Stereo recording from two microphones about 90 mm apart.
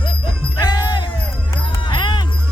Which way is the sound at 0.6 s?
50° left (ahead or behind).